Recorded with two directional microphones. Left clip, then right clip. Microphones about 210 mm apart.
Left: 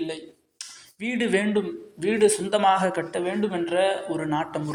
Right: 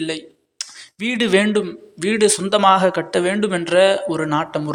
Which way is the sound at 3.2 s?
50° right (ahead or behind).